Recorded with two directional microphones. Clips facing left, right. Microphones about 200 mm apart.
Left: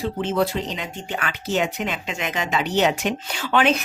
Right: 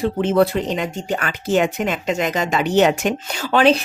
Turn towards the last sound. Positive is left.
turn(degrees=-35)  # may be behind; listen again after turning